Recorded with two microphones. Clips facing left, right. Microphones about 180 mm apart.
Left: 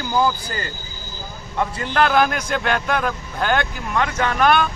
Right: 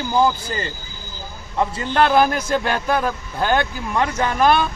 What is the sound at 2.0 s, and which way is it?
Speech, 30° right (ahead or behind).